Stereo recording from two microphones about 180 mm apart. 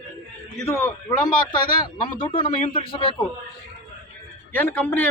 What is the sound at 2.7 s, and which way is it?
Speech, 30° left (ahead or behind).